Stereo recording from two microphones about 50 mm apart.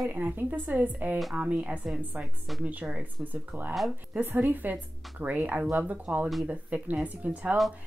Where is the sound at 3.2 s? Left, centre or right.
Right.